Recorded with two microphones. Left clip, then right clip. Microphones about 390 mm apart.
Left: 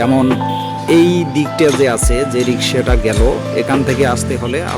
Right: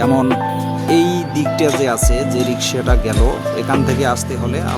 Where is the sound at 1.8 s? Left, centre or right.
Right.